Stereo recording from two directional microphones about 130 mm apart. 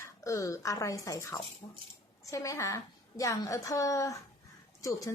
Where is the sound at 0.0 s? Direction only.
25° left (ahead or behind).